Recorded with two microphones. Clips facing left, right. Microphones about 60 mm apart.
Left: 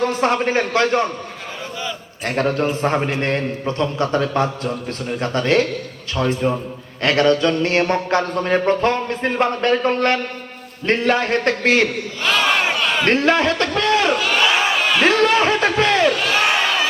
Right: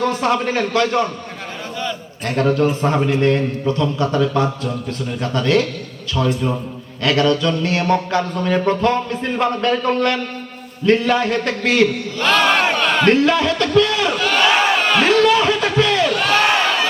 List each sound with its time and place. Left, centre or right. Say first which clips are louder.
0.0 s a man's voice: even; left
2.6 s mantra: right 2 dB; left
9.6 s a man's voice: left 1 dB; left
9.9 s mantra: even; left
12.2 s battle cry: right 3 dB; centre
13.1 s a man's voice: right 1 dB; left
14.2 s battle cry: right 2 dB; centre
14.6 s crowd: right 2 dB; centre
15.0 s a sound: even; left
16.2 s crowd: right 2 dB; centre